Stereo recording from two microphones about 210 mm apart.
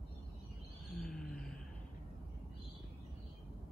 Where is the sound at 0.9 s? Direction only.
Centre (ahead or behind).